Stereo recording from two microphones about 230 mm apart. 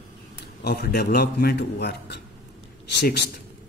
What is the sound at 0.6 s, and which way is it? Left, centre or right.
A man's voice, left.